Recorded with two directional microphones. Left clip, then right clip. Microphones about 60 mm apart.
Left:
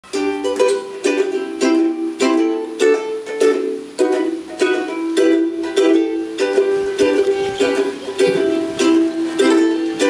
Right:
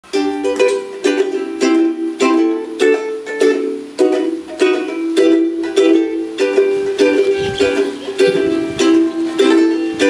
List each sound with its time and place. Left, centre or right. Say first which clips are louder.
0.1 s music: right 3 dB; right